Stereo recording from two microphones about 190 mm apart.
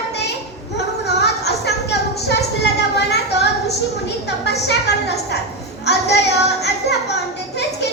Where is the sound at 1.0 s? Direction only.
60° left (ahead or behind).